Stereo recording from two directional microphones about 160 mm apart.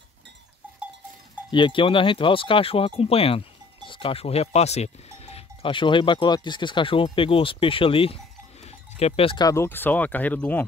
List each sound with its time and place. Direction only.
1.5 s speech: 30° left (ahead or behind)
8.6 s cowbell: 40° left (ahead or behind)
9.4 s speech: 20° left (ahead or behind)